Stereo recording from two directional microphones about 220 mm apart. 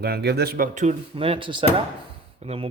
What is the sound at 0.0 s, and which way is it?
Speech, 45° right (ahead or behind).